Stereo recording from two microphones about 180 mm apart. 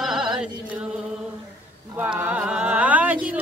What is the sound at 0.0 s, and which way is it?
Chant, 5° right (ahead or behind).